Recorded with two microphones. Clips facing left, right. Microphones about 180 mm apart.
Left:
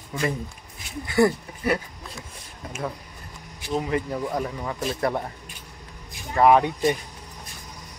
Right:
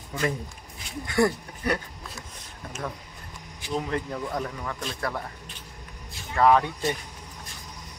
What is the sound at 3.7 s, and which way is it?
Speech, 5° left (ahead or behind).